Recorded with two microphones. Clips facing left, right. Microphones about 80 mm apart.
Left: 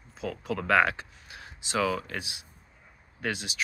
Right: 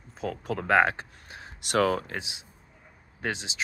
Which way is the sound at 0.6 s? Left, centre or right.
Right.